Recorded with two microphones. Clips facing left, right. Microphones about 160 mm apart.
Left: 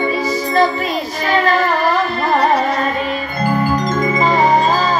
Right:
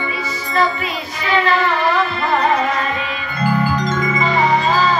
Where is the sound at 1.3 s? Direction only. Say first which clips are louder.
Left 1 dB; 40° left (ahead or behind).